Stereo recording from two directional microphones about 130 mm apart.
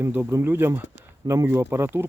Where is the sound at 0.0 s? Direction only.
15° right (ahead or behind).